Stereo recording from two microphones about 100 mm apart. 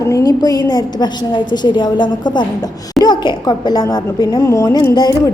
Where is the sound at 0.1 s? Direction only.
40° left (ahead or behind).